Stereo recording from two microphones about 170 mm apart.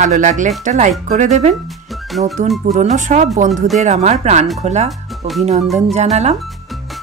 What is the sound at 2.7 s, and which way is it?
Speech, 45° right (ahead or behind).